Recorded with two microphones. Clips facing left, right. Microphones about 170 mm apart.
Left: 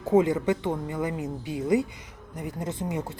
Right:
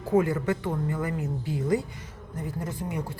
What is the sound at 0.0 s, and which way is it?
Speech, 20° left (ahead or behind).